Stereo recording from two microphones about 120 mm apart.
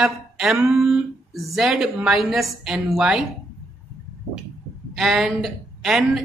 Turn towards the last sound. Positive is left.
turn(degrees=0)  # may be behind; listen again after turning